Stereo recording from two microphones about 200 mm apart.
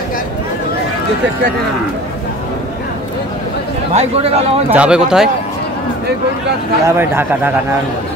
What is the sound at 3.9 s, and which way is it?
Speech, 30° right (ahead or behind).